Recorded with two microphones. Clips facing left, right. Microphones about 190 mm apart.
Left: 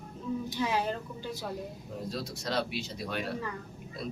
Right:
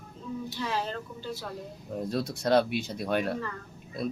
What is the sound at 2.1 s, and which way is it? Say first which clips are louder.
Speech: right 9 dB; 55° right (ahead or behind).